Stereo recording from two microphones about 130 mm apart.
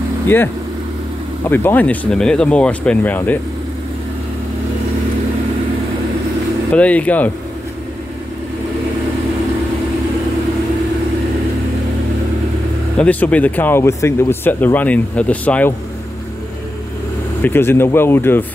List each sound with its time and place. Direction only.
1.5 s speech: 15° left (ahead or behind)
6.7 s speech: 10° left (ahead or behind)
12.9 s speech: 10° left (ahead or behind)
17.4 s speech: 15° left (ahead or behind)